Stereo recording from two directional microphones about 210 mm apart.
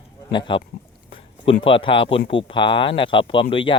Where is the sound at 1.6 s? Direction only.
25° left (ahead or behind).